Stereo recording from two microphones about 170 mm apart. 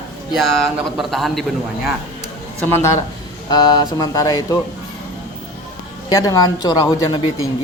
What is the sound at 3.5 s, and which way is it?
Speech, 25° left (ahead or behind).